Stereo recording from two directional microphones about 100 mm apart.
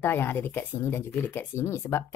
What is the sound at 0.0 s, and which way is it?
Speech, 20° left (ahead or behind).